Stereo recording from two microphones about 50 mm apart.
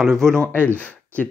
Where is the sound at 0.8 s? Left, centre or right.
Left.